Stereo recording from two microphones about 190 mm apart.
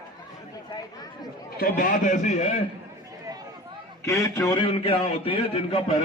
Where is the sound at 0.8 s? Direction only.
20° left (ahead or behind).